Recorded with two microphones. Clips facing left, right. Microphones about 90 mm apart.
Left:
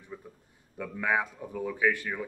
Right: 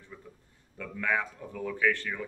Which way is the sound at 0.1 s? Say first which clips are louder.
Left 5 dB; 25° left (ahead or behind).